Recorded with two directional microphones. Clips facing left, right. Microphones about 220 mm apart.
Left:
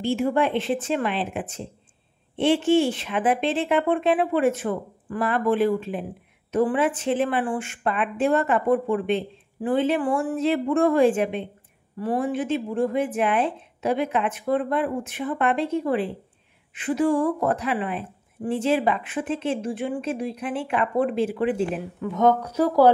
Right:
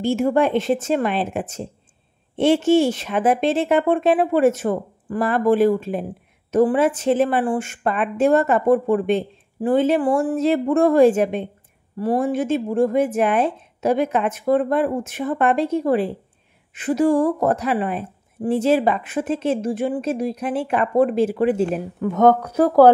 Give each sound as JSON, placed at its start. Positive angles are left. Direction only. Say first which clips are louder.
{"t": 0.0, "sound": "a woman's voice", "louder": "right 4 dB", "side_deg": -45}